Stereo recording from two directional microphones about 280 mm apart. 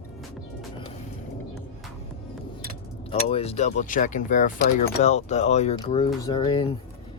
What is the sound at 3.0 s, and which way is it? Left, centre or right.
Speech, left.